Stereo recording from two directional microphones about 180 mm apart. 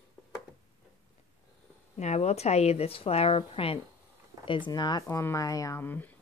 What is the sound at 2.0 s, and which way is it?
A woman's voice, 40° left (ahead or behind).